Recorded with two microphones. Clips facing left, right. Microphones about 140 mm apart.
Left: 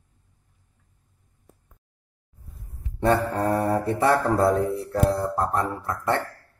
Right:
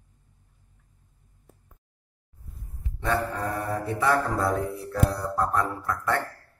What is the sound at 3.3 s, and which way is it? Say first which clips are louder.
Mantra: left 7 dB; 55° left (ahead or behind).